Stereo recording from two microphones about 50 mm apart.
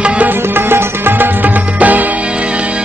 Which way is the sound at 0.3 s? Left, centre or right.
Right.